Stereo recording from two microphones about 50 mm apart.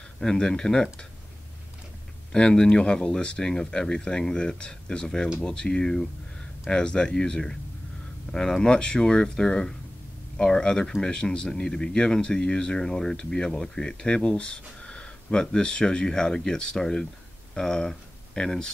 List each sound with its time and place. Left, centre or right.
0.2 s speech: centre
2.3 s speech: centre